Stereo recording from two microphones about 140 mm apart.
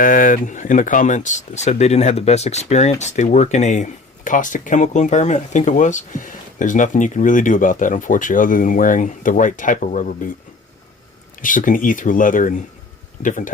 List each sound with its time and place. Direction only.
0.0 s speech: 75° left (ahead or behind)
11.3 s speech: 70° left (ahead or behind)